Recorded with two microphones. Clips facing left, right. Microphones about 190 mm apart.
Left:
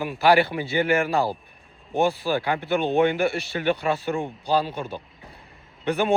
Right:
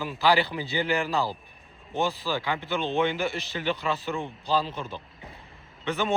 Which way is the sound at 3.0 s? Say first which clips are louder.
Left 6 dB; 55° left (ahead or behind).